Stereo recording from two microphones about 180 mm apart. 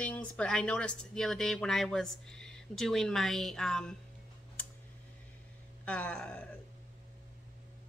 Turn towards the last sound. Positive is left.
turn(degrees=10)  # may be behind; listen again after turning